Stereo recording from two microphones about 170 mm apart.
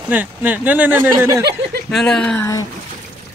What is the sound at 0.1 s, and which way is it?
Speech, 10° right (ahead or behind).